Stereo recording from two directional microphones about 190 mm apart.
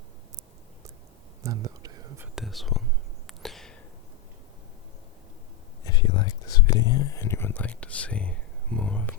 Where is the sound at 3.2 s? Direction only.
Centre (ahead or behind).